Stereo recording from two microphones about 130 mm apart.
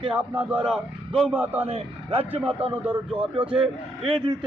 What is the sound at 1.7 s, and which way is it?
A man's voice, 50° right (ahead or behind).